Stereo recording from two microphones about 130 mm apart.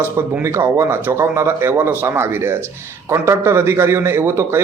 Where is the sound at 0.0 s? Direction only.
20° right (ahead or behind).